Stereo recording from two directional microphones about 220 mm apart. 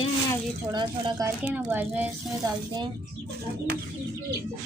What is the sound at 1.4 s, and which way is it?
Speech, 10° right (ahead or behind).